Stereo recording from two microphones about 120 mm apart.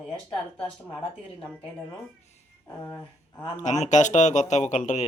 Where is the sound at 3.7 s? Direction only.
80° left.